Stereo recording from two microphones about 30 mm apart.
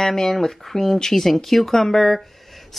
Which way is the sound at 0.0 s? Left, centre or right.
Centre.